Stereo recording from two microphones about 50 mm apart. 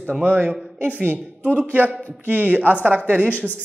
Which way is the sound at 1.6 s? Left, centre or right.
Right.